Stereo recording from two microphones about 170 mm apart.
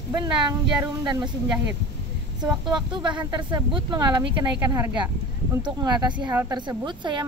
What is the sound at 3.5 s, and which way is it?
Speech, 25° right (ahead or behind).